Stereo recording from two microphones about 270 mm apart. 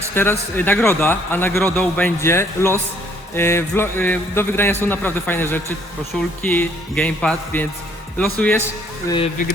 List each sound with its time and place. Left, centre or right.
0.1 s speech: centre
9.0 s speech: centre